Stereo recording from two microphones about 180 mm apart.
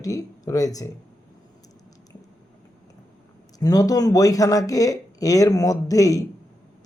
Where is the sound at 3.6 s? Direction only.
20° left (ahead or behind).